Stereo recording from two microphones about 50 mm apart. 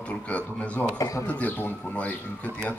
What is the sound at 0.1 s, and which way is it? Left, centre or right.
A man's voice, left.